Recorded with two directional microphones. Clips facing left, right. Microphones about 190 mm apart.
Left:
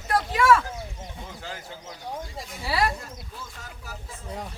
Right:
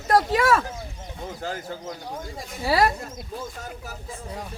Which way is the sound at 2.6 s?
45° right (ahead or behind).